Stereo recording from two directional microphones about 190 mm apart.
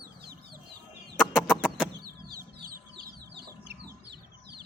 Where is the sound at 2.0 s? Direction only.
50° right (ahead or behind).